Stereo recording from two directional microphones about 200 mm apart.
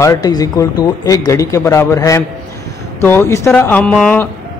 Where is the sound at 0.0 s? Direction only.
15° left (ahead or behind).